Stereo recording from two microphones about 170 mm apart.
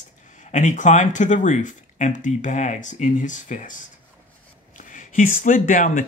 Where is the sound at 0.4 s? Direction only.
45° left (ahead or behind).